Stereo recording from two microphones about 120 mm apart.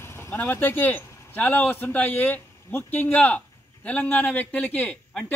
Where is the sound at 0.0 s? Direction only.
20° left (ahead or behind).